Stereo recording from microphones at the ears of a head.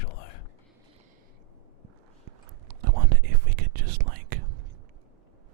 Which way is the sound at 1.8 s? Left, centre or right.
Right.